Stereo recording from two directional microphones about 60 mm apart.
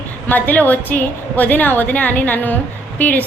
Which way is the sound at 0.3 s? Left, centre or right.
Left.